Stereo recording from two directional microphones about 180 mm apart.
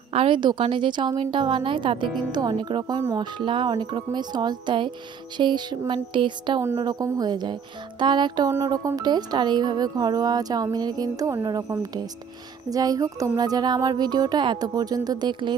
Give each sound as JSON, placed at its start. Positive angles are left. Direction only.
{"t": 0.1, "sound": "speech", "side_deg": -30}
{"t": 3.0, "sound": "speech", "side_deg": -15}
{"t": 3.3, "sound": "speech", "side_deg": -25}